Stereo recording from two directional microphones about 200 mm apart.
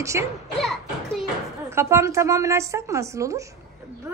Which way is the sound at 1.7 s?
15° right (ahead or behind).